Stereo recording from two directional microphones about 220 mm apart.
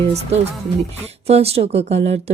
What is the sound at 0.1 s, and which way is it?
A woman's voice, 30° right (ahead or behind).